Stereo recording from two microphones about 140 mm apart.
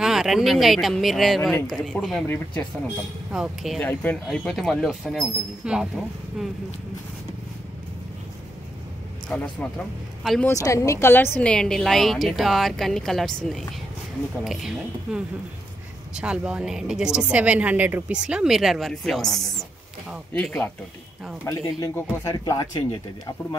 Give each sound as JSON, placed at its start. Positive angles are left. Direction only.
{"t": 0.0, "sound": "a woman's voice", "side_deg": -5}
{"t": 3.3, "sound": "a woman's voice", "side_deg": -5}
{"t": 3.8, "sound": "a woman's voice", "side_deg": 10}
{"t": 9.3, "sound": "a woman's voice", "side_deg": 5}
{"t": 10.4, "sound": "a woman's voice", "side_deg": 20}
{"t": 21.5, "sound": "speech", "side_deg": 25}